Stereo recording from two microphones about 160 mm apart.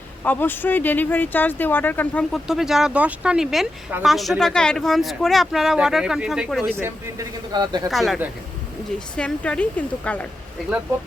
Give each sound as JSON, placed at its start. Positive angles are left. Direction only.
{"t": 0.3, "sound": "speech", "side_deg": 10}
{"t": 2.5, "sound": "speech", "side_deg": 0}
{"t": 6.7, "sound": "speech", "side_deg": -15}
{"t": 7.5, "sound": "speech", "side_deg": -25}
{"t": 7.9, "sound": "speech", "side_deg": 0}